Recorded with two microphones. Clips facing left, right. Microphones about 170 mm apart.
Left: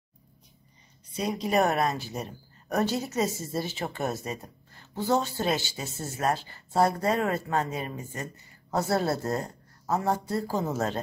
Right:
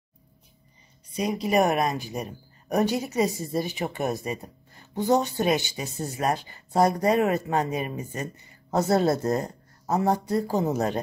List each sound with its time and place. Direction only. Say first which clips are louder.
1.1 s speech: right 3 dB; 10° right (ahead or behind)